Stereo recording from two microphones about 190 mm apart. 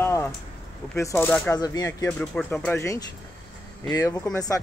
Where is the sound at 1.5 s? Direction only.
20° left (ahead or behind).